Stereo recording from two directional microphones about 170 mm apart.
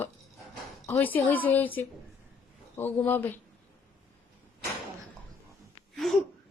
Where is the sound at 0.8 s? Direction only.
15° left (ahead or behind).